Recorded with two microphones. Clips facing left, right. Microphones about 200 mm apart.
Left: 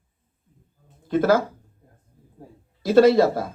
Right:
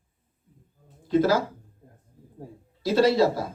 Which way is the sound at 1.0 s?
55° left (ahead or behind).